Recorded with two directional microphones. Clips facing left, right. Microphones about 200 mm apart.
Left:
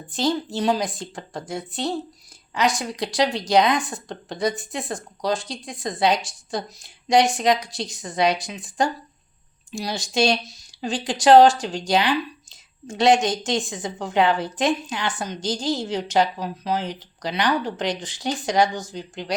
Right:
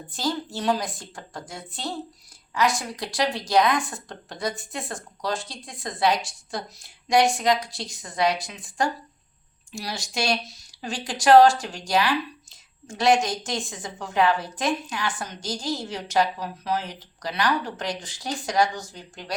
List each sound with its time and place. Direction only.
0.1 s a woman's voice: 20° left (ahead or behind)